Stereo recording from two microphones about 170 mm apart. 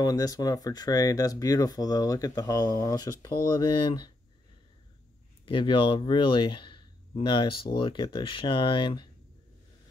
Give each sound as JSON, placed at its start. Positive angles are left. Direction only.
{"t": 0.0, "sound": "speech", "side_deg": 20}
{"t": 5.4, "sound": "speech", "side_deg": 30}